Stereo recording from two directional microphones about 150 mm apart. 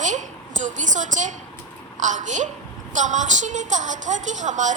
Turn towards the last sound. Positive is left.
turn(degrees=-55)  # may be behind; listen again after turning